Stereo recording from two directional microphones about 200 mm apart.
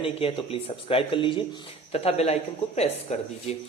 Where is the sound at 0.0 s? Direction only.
30° left (ahead or behind).